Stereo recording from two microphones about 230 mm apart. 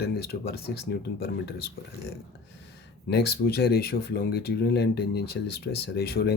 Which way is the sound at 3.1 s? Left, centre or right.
Left.